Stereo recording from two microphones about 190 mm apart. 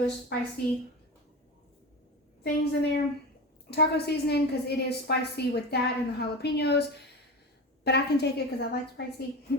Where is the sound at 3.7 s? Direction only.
60° left (ahead or behind).